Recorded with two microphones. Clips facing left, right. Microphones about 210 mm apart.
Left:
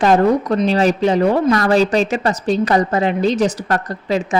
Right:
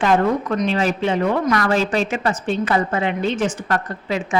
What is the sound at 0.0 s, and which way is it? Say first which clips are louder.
A woman's voice: left 4 dB; 35° left (ahead or behind).